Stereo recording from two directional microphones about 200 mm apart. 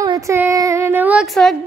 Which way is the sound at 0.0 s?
15° right (ahead or behind).